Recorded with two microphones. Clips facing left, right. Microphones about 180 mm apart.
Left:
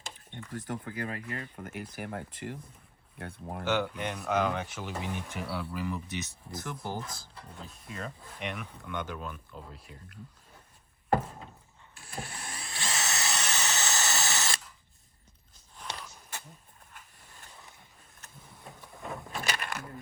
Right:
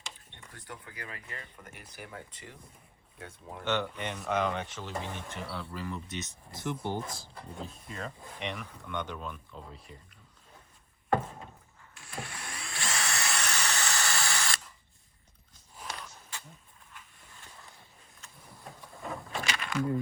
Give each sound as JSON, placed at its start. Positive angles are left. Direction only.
{"t": 0.5, "sound": "speech", "side_deg": 45}
{"t": 3.6, "sound": "speech", "side_deg": 5}
{"t": 12.1, "sound": "power windows", "side_deg": 25}
{"t": 12.9, "sound": "drill", "side_deg": 20}
{"t": 15.7, "sound": "a sound", "side_deg": -5}
{"t": 18.6, "sound": "vehicle", "side_deg": 0}
{"t": 19.5, "sound": "a sound", "side_deg": 55}